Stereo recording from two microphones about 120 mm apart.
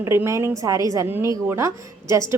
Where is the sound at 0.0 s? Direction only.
20° right (ahead or behind).